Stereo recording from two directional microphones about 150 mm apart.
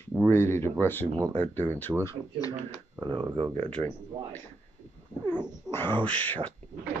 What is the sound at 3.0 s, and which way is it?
Speech, 30° right (ahead or behind).